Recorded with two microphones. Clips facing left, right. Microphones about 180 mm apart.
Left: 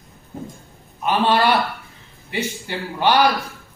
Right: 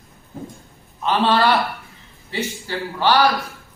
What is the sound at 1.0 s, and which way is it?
A man's voice, 15° left (ahead or behind).